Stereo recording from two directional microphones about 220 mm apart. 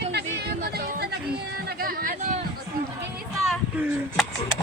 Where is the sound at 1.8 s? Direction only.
40° right (ahead or behind).